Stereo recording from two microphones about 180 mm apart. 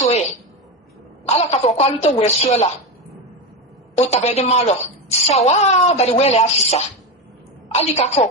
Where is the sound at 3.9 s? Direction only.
35° left (ahead or behind).